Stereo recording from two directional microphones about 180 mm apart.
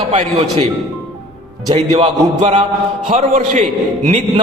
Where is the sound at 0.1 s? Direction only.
40° right (ahead or behind).